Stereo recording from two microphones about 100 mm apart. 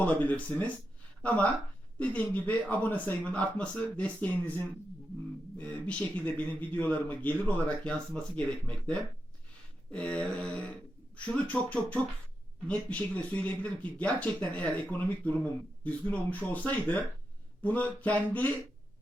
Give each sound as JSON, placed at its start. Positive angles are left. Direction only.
{"t": 0.0, "sound": "speech", "side_deg": 15}
{"t": 5.5, "sound": "speech", "side_deg": 15}